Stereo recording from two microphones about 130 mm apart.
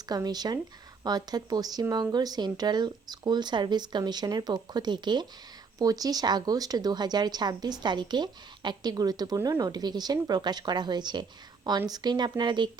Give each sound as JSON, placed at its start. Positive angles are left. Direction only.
{"t": 0.1, "sound": "speech", "side_deg": -30}